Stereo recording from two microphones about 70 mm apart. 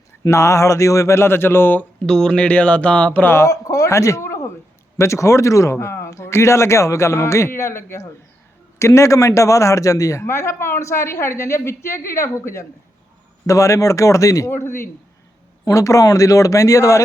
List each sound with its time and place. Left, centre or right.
0.3 s a man's voice: left
2.0 s speech: centre
3.3 s a man's voice: left
13.5 s a man's voice: left
14.5 s a man's voice: left
15.6 s a man's voice: left